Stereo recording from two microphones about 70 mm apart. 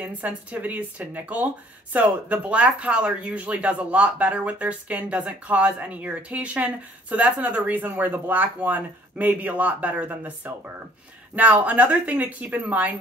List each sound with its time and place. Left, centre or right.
0.0 s speech: right